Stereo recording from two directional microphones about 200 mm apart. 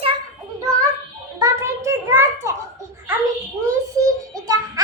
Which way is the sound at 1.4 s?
15° right (ahead or behind).